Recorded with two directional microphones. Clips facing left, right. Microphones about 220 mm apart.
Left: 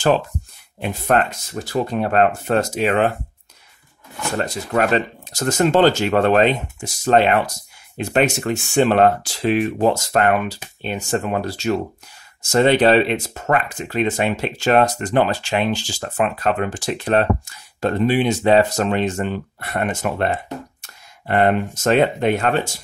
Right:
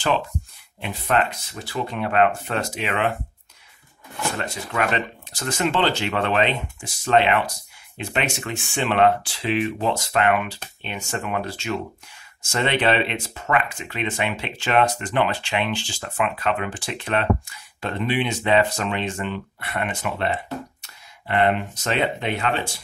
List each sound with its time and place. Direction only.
0.7 s speech: 45° left (ahead or behind)
4.4 s speech: 40° left (ahead or behind)